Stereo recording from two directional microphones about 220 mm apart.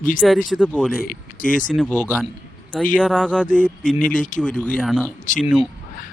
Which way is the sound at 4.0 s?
35° left (ahead or behind).